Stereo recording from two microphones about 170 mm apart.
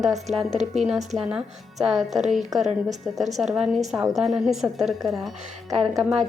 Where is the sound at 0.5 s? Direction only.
40° right (ahead or behind).